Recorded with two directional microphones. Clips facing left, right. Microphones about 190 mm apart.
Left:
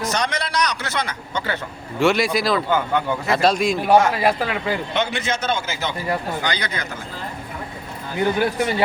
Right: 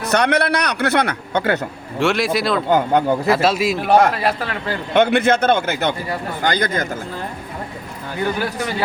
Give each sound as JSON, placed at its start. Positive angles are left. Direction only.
{"t": 0.1, "sound": "speech", "side_deg": -60}
{"t": 2.0, "sound": "a man's voice", "side_deg": 0}
{"t": 2.6, "sound": "speech", "side_deg": -40}
{"t": 3.3, "sound": "a man's voice", "side_deg": -5}
{"t": 4.1, "sound": "speech", "side_deg": 10}
{"t": 4.9, "sound": "speech", "side_deg": -60}
{"t": 6.4, "sound": "speech", "side_deg": -50}
{"t": 8.4, "sound": "speech", "side_deg": 20}